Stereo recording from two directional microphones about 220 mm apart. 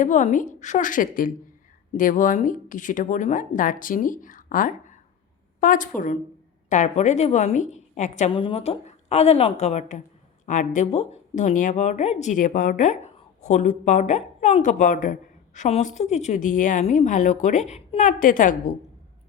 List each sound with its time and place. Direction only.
0.0 s a woman's voice: 35° left (ahead or behind)